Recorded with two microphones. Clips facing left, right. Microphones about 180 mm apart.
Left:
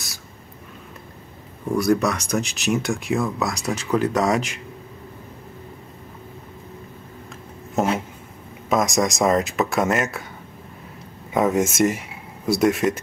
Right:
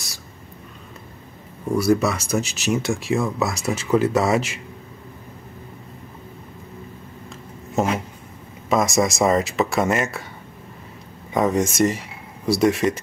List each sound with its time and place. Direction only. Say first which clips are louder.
1.7 s speech: right 1 dB; 5° right (ahead or behind)
7.8 s a sound: even; centre (ahead or behind)
8.6 s speech: right 1 dB; centre (ahead or behind)
11.3 s speech: even; 5° left (ahead or behind)